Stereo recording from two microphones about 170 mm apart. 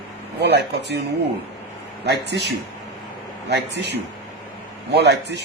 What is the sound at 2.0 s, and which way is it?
A man's voice, 75° right (ahead or behind).